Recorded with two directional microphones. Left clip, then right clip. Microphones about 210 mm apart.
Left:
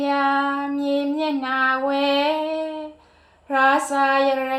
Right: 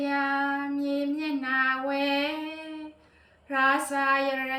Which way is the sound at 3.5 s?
20° right (ahead or behind).